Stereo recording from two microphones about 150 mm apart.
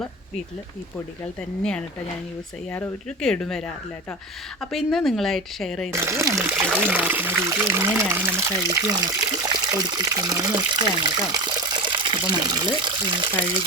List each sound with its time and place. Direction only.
1.4 s a woman's voice: 5° left (ahead or behind)
3.2 s a woman's voice: 5° left (ahead or behind)
4.6 s a woman's voice: centre (ahead or behind)
5.9 s speech: 15° right (ahead or behind)